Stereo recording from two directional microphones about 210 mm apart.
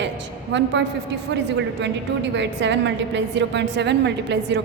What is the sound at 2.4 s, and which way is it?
A woman's voice, 55° right (ahead or behind).